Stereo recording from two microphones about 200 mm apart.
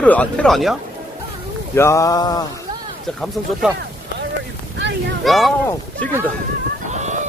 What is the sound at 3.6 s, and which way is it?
Speech, 5° right (ahead or behind).